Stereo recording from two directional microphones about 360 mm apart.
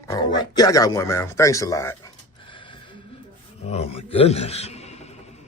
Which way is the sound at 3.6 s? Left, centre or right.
Centre.